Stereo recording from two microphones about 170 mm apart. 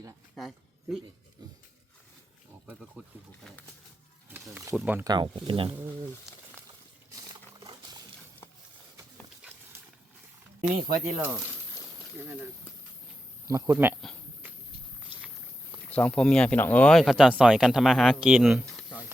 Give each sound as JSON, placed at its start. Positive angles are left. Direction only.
{"t": 0.3, "sound": "a sound", "side_deg": 0}
{"t": 2.6, "sound": "wild animals", "side_deg": -5}
{"t": 4.3, "sound": "snake", "side_deg": -10}
{"t": 4.7, "sound": "speech", "side_deg": -5}
{"t": 4.9, "sound": "speech", "side_deg": -25}
{"t": 7.6, "sound": "a sound", "side_deg": -30}
{"t": 10.6, "sound": "speech", "side_deg": -45}
{"t": 10.8, "sound": "speech", "side_deg": -15}
{"t": 13.5, "sound": "speech", "side_deg": -20}
{"t": 15.9, "sound": "speech", "side_deg": 10}